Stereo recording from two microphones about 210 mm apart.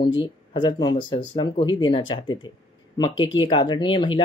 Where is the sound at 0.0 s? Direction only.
25° left (ahead or behind).